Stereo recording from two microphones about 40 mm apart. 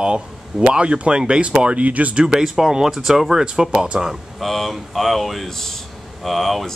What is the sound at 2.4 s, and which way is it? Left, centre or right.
Speech, centre.